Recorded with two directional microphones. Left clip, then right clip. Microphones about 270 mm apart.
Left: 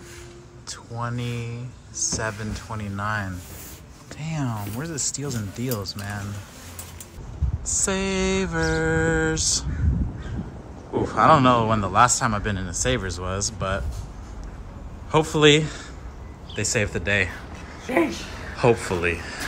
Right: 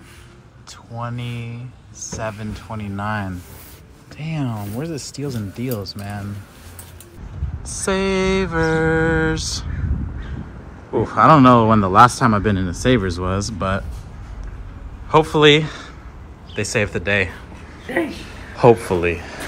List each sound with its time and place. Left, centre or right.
0.7 s speech: centre
7.6 s speech: centre
10.9 s speech: centre
15.0 s speech: centre
18.6 s speech: centre